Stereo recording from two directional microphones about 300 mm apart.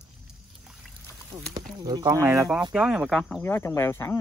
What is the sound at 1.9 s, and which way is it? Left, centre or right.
Speech, centre.